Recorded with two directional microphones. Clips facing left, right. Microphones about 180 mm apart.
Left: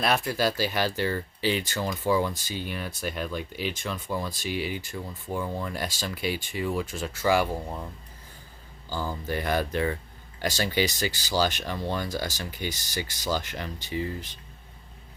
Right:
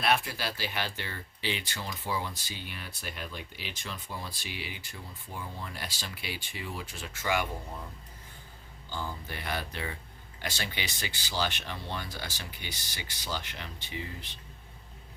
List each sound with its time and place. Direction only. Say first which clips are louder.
0.0 s speech: left 5 dB; 40° left (ahead or behind)
5.4 s speech: left 10 dB; 90° left
5.7 s speech: left 9 dB; 45° left (ahead or behind)
8.9 s speech: left 7 dB; 40° left (ahead or behind)